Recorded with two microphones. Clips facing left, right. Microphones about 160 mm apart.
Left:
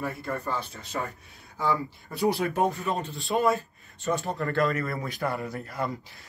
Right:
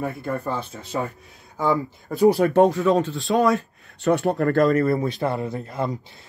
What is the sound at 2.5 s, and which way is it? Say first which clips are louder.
Speech: right 10 dB; 80° right.